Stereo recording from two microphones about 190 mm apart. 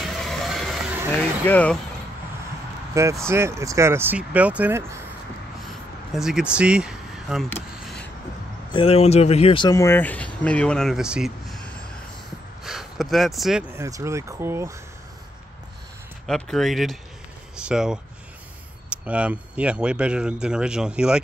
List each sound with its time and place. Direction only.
0.0 s vehicle: centre (ahead or behind)
1.4 s speech: 10° left (ahead or behind)
2.9 s speech: 15° right (ahead or behind)
6.1 s speech: 5° right (ahead or behind)
8.7 s speech: 30° left (ahead or behind); by 11.7 s centre (ahead or behind)
12.6 s a sound: centre (ahead or behind)
13.7 s speech: 15° right (ahead or behind)
16.3 s speech: 5° left (ahead or behind)